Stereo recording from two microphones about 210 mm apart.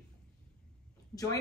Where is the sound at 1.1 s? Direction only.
15° left (ahead or behind).